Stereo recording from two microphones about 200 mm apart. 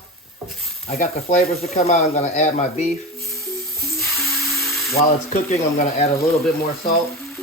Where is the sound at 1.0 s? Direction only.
35° left (ahead or behind).